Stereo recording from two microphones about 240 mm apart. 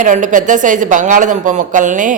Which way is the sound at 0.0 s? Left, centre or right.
Right.